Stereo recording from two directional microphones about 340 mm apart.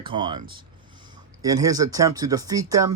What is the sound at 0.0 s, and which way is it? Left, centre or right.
Speech, centre.